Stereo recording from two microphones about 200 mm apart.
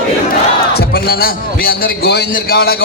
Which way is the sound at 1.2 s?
50° left (ahead or behind).